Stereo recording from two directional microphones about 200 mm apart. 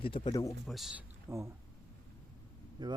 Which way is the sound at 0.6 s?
Centre (ahead or behind).